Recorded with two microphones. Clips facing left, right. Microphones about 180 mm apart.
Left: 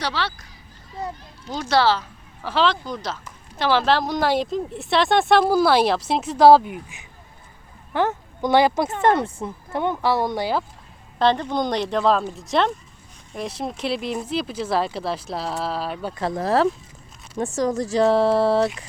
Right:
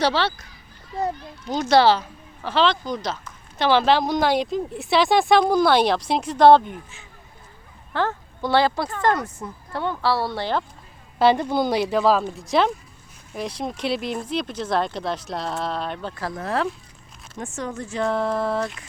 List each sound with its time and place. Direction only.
0.0 s speech: 30° right (ahead or behind)
1.5 s speech: 15° right (ahead or behind)
2.4 s speech: 5° left (ahead or behind)
7.9 s speech: 15° left (ahead or behind)
11.2 s speech: 10° right (ahead or behind); by 16.1 s 5° left (ahead or behind)
16.1 s speech: 25° left (ahead or behind)